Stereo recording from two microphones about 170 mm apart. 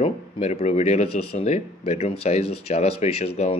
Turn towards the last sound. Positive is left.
turn(degrees=35)  # may be behind; listen again after turning